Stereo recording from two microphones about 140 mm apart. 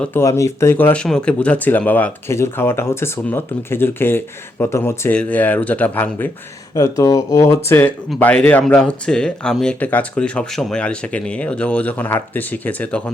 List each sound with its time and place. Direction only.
0.0 s speech: 15° left (ahead or behind)